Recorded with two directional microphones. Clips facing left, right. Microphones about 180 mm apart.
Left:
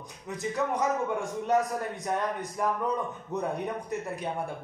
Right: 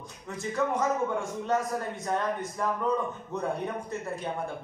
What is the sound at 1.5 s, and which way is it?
A man's voice, 15° left (ahead or behind).